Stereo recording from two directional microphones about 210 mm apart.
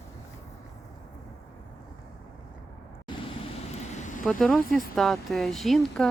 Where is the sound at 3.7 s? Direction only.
35° left (ahead or behind).